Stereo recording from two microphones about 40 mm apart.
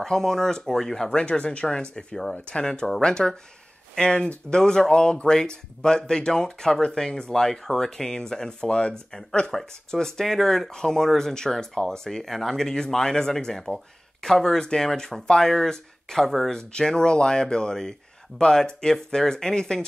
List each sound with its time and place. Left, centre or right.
0.0 s speech: centre
1.1 s speech: left; by 16.4 s centre
16.4 s speech: centre